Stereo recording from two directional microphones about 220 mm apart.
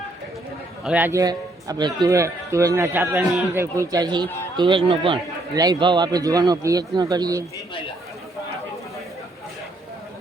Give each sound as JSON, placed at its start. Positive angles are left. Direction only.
{"t": 0.9, "sound": "a man's voice", "side_deg": -10}